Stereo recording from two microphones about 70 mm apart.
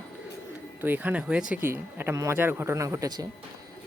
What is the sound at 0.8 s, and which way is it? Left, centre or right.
Speech, right.